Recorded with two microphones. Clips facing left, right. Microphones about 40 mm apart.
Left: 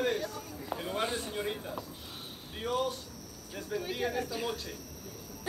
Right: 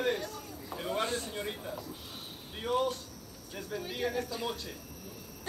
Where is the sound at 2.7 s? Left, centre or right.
Right.